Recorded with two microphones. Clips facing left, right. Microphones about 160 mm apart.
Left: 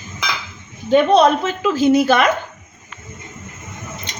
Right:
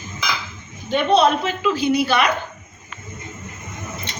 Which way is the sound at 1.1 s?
45° left (ahead or behind).